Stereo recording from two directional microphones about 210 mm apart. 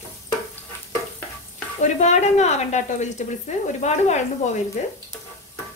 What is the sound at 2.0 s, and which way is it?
Speech, 35° left (ahead or behind).